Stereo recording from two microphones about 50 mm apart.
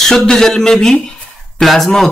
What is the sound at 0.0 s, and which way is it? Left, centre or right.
Speech, centre.